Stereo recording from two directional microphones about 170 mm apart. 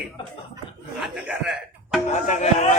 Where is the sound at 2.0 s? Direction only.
40° left (ahead or behind).